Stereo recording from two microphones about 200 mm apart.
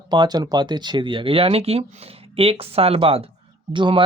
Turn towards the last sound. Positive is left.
turn(degrees=-25)  # may be behind; listen again after turning